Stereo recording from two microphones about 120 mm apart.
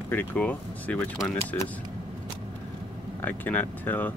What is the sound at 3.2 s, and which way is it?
Speech, 15° left (ahead or behind).